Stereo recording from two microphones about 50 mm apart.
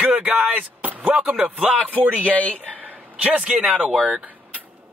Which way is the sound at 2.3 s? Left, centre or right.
Left.